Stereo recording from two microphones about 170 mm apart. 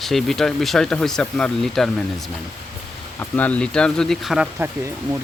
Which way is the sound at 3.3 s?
10° left (ahead or behind).